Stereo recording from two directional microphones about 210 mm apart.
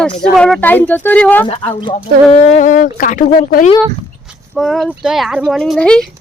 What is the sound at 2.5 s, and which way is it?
Speech, 35° left (ahead or behind).